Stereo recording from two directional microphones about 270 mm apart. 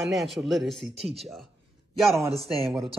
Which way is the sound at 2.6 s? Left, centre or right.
Centre.